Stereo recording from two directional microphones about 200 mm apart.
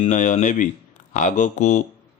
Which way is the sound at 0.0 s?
40° left (ahead or behind).